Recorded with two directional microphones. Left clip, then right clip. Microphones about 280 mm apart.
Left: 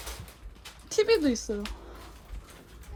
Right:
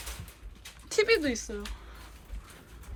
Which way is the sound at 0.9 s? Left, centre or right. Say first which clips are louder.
Left 1 dB; centre.